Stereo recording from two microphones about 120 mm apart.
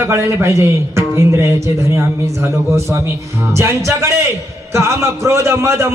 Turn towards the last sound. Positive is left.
turn(degrees=-25)  # may be behind; listen again after turning